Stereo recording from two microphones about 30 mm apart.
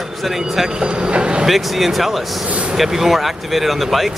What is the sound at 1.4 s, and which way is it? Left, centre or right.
Speech, centre.